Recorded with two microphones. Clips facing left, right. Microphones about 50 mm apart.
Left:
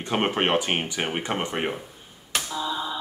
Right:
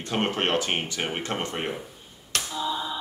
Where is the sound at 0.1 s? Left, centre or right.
Centre.